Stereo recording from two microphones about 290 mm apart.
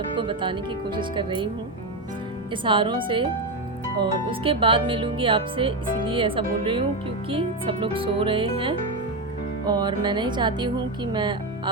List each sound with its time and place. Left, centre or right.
0.2 s speech: centre
2.5 s speech: centre